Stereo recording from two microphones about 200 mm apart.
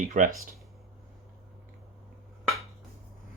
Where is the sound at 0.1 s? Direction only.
40° right (ahead or behind).